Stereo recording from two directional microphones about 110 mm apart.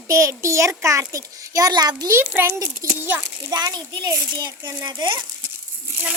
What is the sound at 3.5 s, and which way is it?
A child's voice, 40° right (ahead or behind).